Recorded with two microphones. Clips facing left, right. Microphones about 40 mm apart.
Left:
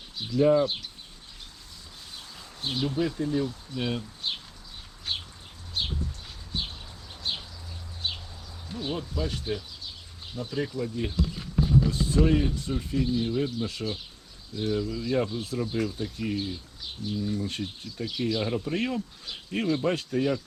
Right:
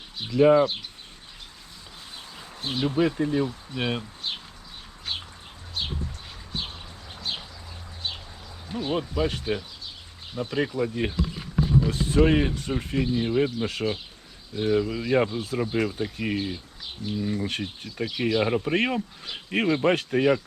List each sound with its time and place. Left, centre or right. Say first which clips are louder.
0.2 s speech: right 4 dB; right
2.7 s speech: right 5 dB; right
8.7 s speech: right 5 dB; right
11.2 s a sound: right 1 dB; centre
12.1 s speech: right 4 dB; right
17.6 s speech: right 3 dB; right